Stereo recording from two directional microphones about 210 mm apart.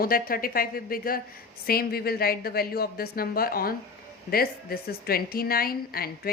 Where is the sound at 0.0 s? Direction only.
45° left (ahead or behind).